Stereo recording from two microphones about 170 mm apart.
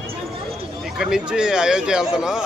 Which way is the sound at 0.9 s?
5° right (ahead or behind).